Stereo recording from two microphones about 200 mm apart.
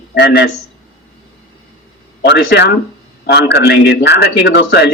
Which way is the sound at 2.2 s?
55° left (ahead or behind).